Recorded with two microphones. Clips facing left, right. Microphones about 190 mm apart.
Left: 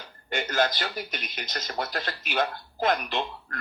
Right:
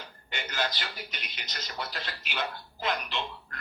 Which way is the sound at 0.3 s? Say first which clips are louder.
Left 8 dB; 50° left (ahead or behind).